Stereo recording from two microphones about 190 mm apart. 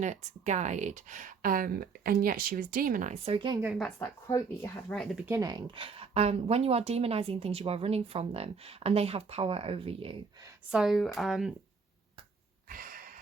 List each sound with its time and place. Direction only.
0.0 s speech: 40° right (ahead or behind)
3.3 s a woman's voice: 25° right (ahead or behind)
3.6 s speech: 10° right (ahead or behind)
3.8 s speech: 10° left (ahead or behind)
5.2 s speech: 15° right (ahead or behind)
10.7 s speech: centre (ahead or behind)
12.6 s a sound: 50° right (ahead or behind)